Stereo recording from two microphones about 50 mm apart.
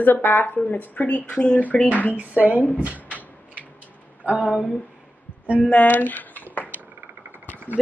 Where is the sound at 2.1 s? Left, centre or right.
Right.